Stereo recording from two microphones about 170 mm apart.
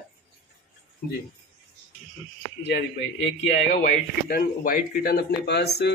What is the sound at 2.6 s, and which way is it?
A man's voice, 90° left.